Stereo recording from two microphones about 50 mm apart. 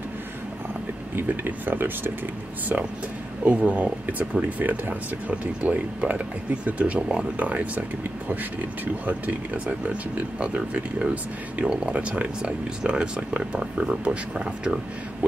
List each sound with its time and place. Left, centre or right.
1.1 s speech: right
2.7 s speech: right
11.6 s speech: centre